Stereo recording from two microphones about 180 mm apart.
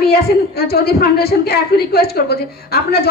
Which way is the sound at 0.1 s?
60° left (ahead or behind).